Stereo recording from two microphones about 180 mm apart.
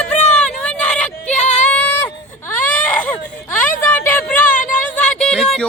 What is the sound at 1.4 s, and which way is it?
Female singing, 40° left (ahead or behind).